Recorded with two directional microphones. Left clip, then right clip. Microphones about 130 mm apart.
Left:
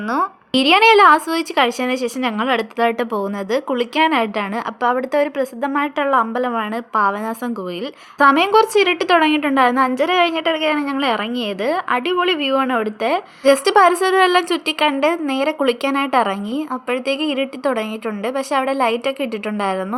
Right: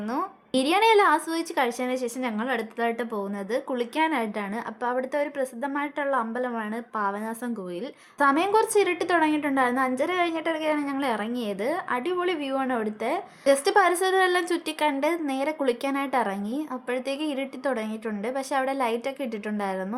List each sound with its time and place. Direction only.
0.1 s a woman's voice: 25° left (ahead or behind)